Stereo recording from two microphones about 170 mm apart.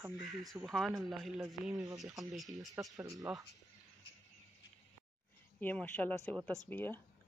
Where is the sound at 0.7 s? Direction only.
Centre (ahead or behind).